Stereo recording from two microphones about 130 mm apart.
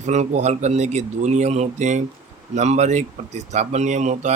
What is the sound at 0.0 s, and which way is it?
Speech, 60° right (ahead or behind).